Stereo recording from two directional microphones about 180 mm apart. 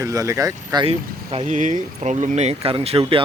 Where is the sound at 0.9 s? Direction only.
35° right (ahead or behind).